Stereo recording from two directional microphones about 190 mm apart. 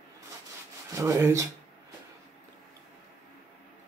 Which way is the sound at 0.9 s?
15° right (ahead or behind).